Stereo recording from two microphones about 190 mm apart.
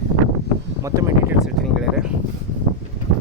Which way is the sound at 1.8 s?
5° right (ahead or behind).